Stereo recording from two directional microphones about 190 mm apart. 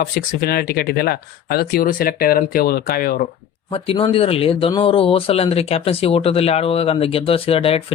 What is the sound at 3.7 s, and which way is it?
Speech, 30° left (ahead or behind).